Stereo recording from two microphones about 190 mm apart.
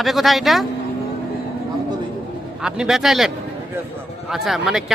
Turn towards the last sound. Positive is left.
turn(degrees=0)  # may be behind; listen again after turning